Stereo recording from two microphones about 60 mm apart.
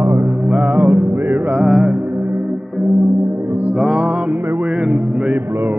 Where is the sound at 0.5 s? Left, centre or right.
Right.